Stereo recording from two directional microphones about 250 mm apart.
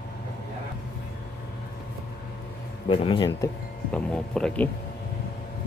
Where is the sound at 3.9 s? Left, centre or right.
Centre.